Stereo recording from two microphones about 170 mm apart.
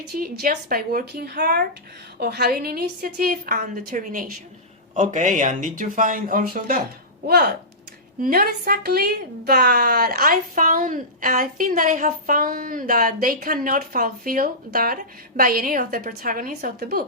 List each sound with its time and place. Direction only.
0.2 s a woman's voice: 60° right (ahead or behind)